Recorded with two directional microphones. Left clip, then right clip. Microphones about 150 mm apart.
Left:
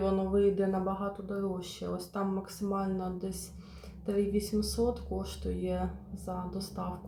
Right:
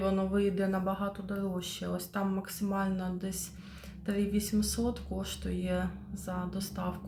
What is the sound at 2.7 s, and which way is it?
Speech, 5° left (ahead or behind).